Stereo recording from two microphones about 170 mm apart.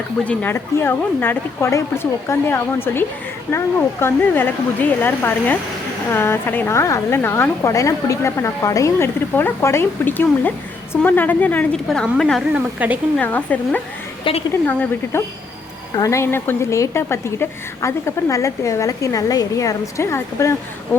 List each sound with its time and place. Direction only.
0.3 s a woman's voice: 15° left (ahead or behind)
14.3 s a woman's voice: 30° left (ahead or behind)
14.7 s a woman's voice: 10° left (ahead or behind)